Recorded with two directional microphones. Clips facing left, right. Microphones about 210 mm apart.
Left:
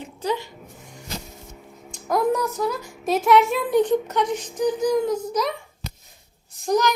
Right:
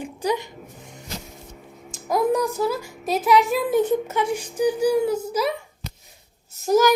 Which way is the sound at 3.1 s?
Centre (ahead or behind).